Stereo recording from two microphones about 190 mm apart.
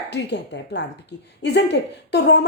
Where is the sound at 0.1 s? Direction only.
65° left (ahead or behind).